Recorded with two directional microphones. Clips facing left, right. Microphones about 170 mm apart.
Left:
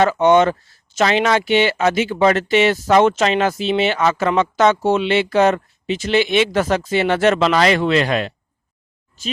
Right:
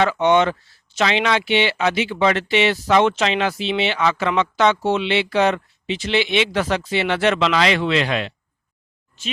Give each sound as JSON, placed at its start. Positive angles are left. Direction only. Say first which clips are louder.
{"t": 0.0, "sound": "speech", "louder": "left 3 dB", "side_deg": 45}